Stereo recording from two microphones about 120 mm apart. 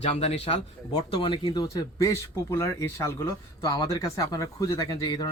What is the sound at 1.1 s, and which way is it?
Speech, 45° left (ahead or behind).